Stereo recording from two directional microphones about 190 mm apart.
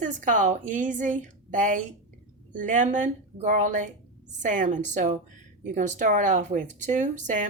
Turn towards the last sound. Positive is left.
turn(degrees=-40)  # may be behind; listen again after turning